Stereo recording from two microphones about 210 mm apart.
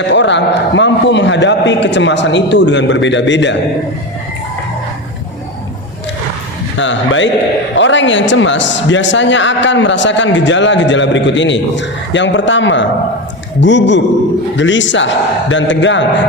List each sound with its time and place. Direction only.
0.1 s a man's voice: 60° left (ahead or behind)
6.7 s a man's voice: 60° left (ahead or behind)